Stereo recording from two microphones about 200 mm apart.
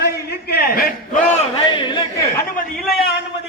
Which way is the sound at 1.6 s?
25° left (ahead or behind).